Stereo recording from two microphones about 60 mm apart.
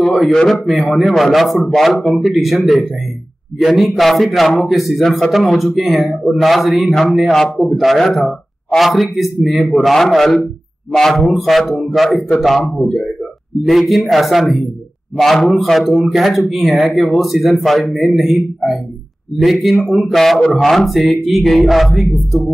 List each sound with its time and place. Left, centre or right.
0.0 s speech: centre
15.7 s speech: centre